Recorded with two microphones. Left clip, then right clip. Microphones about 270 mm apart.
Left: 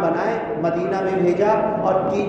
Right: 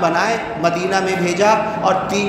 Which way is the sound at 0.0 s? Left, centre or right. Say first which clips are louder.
Right 4 dB; right.